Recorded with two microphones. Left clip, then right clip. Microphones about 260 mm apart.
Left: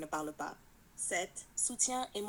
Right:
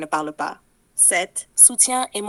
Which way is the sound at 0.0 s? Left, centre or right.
Right.